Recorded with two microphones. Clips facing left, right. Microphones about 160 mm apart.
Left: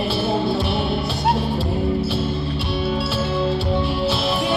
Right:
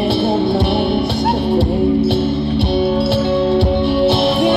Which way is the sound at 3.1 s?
65° right (ahead or behind).